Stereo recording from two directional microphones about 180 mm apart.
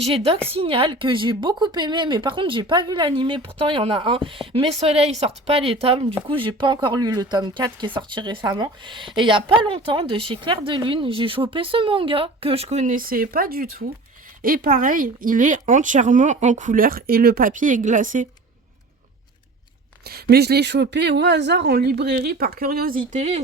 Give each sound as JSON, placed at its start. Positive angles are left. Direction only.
{"t": 0.0, "sound": "speech", "side_deg": -35}
{"t": 20.1, "sound": "speech", "side_deg": -60}